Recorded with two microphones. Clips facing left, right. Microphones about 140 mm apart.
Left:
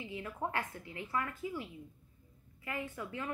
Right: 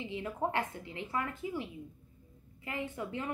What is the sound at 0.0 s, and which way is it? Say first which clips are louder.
A woman's voice: right 4 dB; 25° right (ahead or behind).